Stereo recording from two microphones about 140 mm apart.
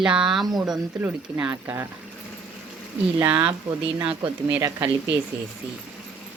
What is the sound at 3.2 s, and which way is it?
Speech, 10° right (ahead or behind).